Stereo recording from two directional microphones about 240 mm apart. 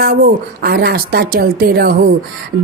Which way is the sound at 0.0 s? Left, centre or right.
Right.